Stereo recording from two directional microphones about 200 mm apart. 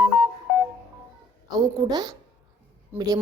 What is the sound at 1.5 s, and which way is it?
A woman's voice, 20° right (ahead or behind).